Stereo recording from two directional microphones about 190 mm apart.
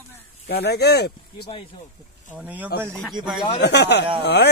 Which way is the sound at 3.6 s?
60° left (ahead or behind).